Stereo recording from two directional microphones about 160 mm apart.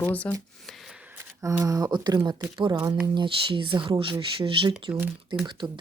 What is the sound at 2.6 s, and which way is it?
Speech, 30° right (ahead or behind).